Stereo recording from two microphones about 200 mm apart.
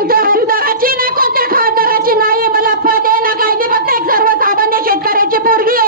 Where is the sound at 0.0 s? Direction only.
45° right (ahead or behind).